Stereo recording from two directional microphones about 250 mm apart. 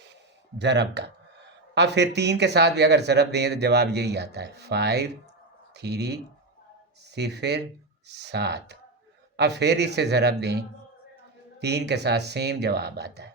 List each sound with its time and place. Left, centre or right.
0.6 s speech: right
11.6 s speech: right